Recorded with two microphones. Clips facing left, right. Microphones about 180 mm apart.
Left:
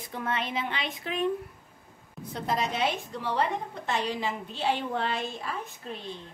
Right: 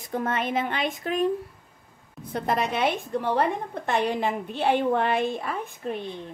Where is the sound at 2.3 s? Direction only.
60° right (ahead or behind).